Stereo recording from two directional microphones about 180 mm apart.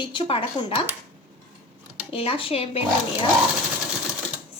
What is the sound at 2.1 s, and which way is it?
Speech, 30° left (ahead or behind).